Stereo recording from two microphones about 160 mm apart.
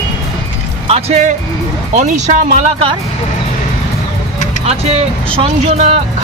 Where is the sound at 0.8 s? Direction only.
40° right (ahead or behind).